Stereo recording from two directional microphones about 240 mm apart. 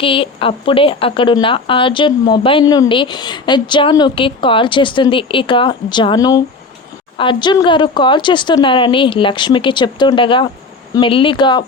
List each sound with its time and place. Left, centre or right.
0.0 s speech: left